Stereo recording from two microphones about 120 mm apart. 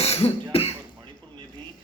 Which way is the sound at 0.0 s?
55° left (ahead or behind).